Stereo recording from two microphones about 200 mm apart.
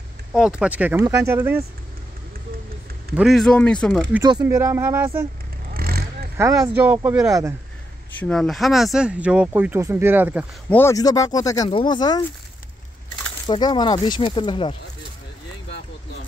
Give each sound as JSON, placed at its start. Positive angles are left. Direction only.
{"t": 0.3, "sound": "speech", "side_deg": -5}
{"t": 3.2, "sound": "speech", "side_deg": 0}
{"t": 4.1, "sound": "speech", "side_deg": -20}
{"t": 5.7, "sound": "vehicle", "side_deg": -50}
{"t": 6.4, "sound": "speech", "side_deg": -15}
{"t": 8.2, "sound": "speech", "side_deg": 0}
{"t": 10.7, "sound": "speech", "side_deg": 15}
{"t": 13.5, "sound": "speech", "side_deg": 20}